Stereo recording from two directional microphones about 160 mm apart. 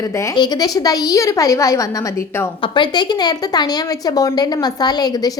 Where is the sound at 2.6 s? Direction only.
30° left (ahead or behind).